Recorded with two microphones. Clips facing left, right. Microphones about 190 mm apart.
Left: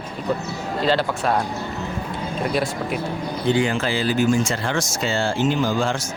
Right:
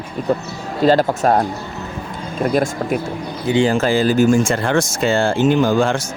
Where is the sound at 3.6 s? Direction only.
40° right (ahead or behind).